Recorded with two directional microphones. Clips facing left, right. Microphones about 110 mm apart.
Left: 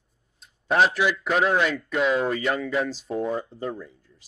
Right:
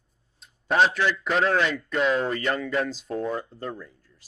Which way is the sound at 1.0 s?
10° left (ahead or behind).